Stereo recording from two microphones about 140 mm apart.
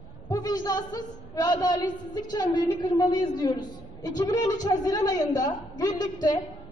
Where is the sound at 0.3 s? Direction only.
25° left (ahead or behind).